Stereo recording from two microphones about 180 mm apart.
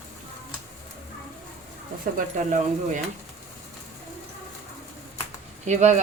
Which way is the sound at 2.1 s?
45° right (ahead or behind).